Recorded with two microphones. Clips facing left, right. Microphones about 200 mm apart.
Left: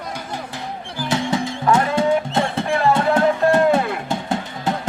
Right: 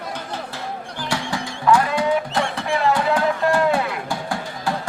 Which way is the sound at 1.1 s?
20° left (ahead or behind).